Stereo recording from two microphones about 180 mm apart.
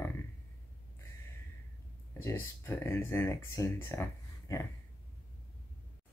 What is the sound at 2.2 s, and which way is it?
Speech, 15° left (ahead or behind).